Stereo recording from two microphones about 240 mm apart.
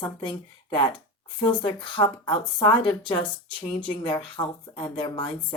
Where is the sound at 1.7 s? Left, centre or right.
Left.